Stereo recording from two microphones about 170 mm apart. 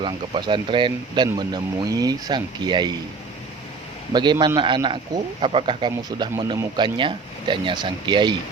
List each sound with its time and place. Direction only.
0.0 s a man's voice: 25° right (ahead or behind)
4.1 s a man's voice: 25° right (ahead or behind)